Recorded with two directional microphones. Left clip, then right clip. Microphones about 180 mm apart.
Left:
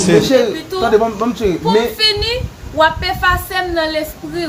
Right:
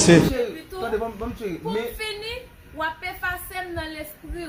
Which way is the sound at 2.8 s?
40° left (ahead or behind).